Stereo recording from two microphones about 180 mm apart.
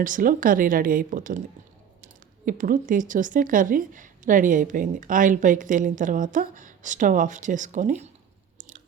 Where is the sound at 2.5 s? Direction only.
50° right (ahead or behind).